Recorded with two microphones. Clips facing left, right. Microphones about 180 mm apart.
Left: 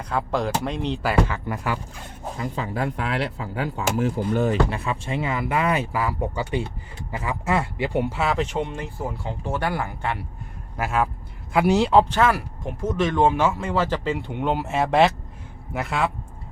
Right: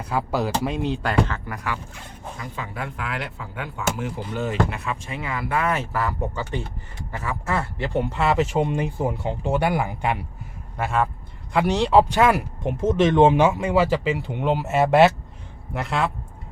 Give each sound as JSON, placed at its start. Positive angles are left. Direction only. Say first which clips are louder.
{"t": 0.0, "sound": "speech", "louder": "even", "side_deg": -5}
{"t": 1.5, "sound": "speech", "louder": "left 3 dB", "side_deg": 25}
{"t": 10.8, "sound": "speech", "louder": "even", "side_deg": 5}
{"t": 12.0, "sound": "speech", "louder": "right 2 dB", "side_deg": -15}